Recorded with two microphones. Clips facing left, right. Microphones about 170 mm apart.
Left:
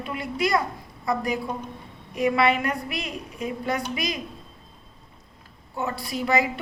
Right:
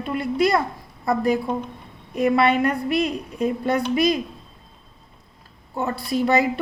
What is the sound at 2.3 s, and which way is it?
A woman's voice, 35° right (ahead or behind).